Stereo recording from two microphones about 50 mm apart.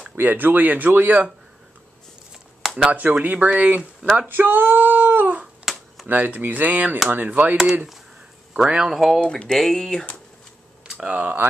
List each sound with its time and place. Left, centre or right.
0.1 s speech: right
2.8 s speech: right
4.3 s female singing: right
5.7 s a sound: centre
6.0 s speech: right
8.6 s speech: right
8.9 s speech: centre
9.2 s speech: centre
9.6 s speech: centre
10.9 s a sound: centre